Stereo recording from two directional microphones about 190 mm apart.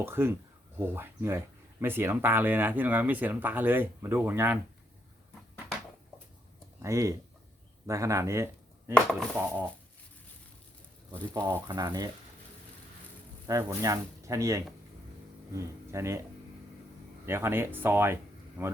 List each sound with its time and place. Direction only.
0.0 s speech: 10° right (ahead or behind)
6.8 s speech: 15° right (ahead or behind)
9.0 s chopping: 5° left (ahead or behind)
11.3 s speech: 20° right (ahead or behind)
13.5 s speech: 15° right (ahead or behind)
17.2 s speech: 10° right (ahead or behind)